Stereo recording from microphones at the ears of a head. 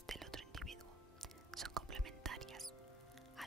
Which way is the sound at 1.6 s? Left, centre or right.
Right.